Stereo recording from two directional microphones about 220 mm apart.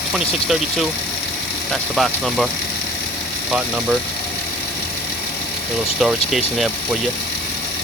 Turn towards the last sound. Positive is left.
turn(degrees=0)  # may be behind; listen again after turning